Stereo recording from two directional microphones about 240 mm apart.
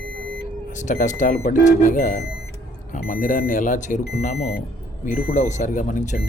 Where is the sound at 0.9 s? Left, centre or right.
Left.